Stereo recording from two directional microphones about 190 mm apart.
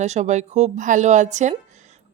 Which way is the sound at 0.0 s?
35° right (ahead or behind).